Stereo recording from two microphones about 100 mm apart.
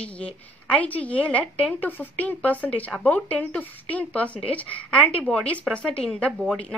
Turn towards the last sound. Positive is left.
turn(degrees=0)  # may be behind; listen again after turning